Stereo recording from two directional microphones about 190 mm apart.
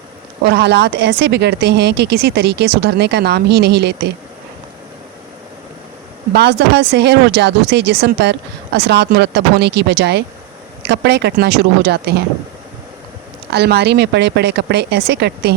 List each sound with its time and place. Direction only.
0.4 s speech: 60° right (ahead or behind)
6.3 s speech: 60° right (ahead or behind)
13.5 s speech: 60° right (ahead or behind)